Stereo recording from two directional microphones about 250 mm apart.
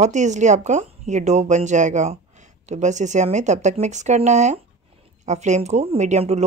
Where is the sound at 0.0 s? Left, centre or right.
Right.